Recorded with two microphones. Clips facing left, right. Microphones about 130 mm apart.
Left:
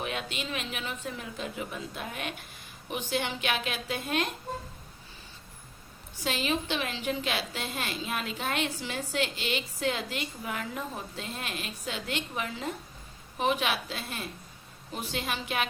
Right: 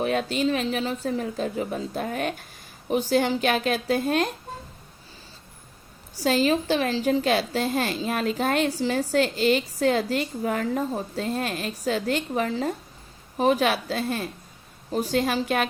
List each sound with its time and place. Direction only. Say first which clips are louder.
0.0 s a woman's voice: right 11 dB; 40° right (ahead or behind)
6.1 s a woman's voice: right 9 dB; 40° right (ahead or behind)